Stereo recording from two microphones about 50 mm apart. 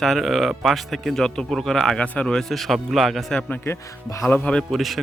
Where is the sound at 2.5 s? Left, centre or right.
Centre.